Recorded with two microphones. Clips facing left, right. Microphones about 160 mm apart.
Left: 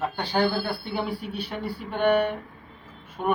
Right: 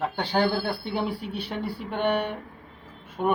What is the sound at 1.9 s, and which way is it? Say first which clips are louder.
Speech: left 4 dB; 5° left (ahead or behind).